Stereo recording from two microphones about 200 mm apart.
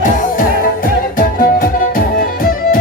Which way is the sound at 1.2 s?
45° left (ahead or behind).